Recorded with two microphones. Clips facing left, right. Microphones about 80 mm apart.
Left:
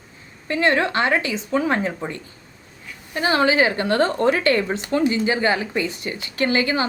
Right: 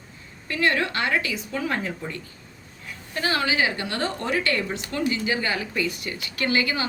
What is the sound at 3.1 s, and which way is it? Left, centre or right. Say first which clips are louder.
A woman's voice: left 6 dB; left.